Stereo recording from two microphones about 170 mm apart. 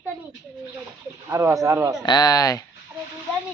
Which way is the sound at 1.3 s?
20° right (ahead or behind).